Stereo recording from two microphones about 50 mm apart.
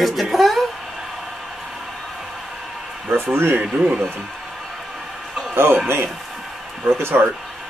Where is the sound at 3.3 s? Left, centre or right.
Right.